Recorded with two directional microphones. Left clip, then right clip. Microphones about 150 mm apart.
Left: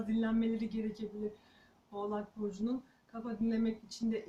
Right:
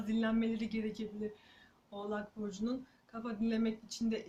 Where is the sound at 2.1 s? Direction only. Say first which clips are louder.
Left 1 dB; 15° right (ahead or behind).